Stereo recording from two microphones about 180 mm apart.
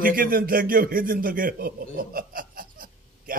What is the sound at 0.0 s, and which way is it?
A man's voice, 50° right (ahead or behind).